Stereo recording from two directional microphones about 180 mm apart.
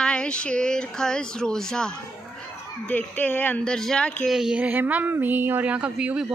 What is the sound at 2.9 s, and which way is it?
Speech, 10° left (ahead or behind).